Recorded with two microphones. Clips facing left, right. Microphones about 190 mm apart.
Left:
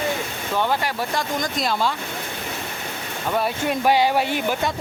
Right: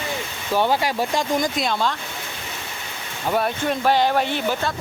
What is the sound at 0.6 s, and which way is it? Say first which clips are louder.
Speech: right 3 dB; 15° right (ahead or behind).